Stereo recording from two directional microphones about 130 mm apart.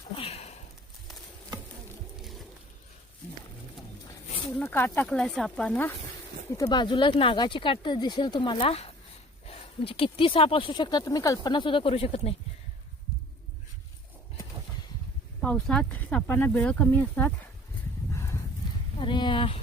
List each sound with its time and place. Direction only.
0.2 s sniff: 55° left (ahead or behind)
2.1 s boat: centre (ahead or behind)
4.6 s speech: 15° left (ahead or behind)
6.6 s speech: 35° left (ahead or behind); by 12.4 s 50° left (ahead or behind)
15.4 s speech: 5° left (ahead or behind)
18.1 s horse: 20° left (ahead or behind)
18.9 s speech: 35° left (ahead or behind)